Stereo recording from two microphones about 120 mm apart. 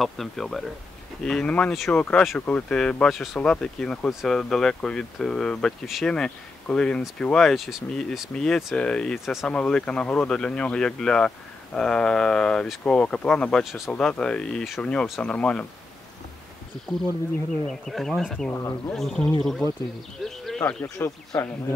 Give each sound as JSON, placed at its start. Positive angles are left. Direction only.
{"t": 0.0, "sound": "speech", "side_deg": 0}
{"t": 9.5, "sound": "speech", "side_deg": 10}
{"t": 17.6, "sound": "speech", "side_deg": 5}
{"t": 18.5, "sound": "speech", "side_deg": 25}
{"t": 18.9, "sound": "speech", "side_deg": 5}
{"t": 20.2, "sound": "a sound", "side_deg": 5}
{"t": 20.6, "sound": "speech", "side_deg": 15}